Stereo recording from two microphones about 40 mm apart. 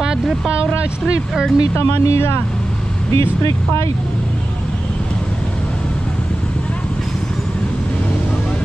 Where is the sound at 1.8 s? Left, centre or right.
Left.